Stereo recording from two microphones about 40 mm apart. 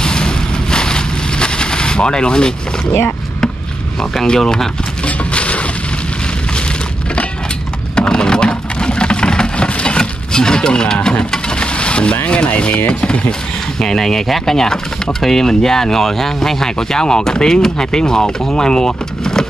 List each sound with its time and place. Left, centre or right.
0.0 s vehicle: left
4.4 s speech: centre
5.0 s a sound: left
7.9 s a sound: left
12.4 s speech: left
13.7 s speech: centre